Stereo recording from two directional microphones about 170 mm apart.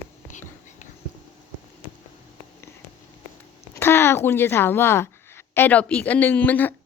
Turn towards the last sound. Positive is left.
turn(degrees=10)  # may be behind; listen again after turning